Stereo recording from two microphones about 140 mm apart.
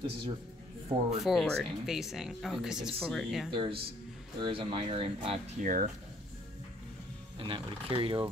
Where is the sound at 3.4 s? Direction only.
40° right (ahead or behind).